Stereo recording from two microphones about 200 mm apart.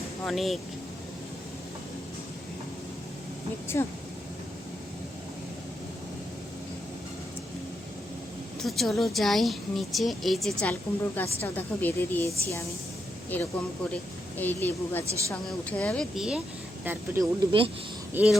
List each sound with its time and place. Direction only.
0.3 s a woman's voice: centre (ahead or behind)
3.7 s speech: 10° left (ahead or behind)
8.6 s a woman's voice: centre (ahead or behind)
17.5 s speech: 25° right (ahead or behind)
18.1 s speech: 5° right (ahead or behind)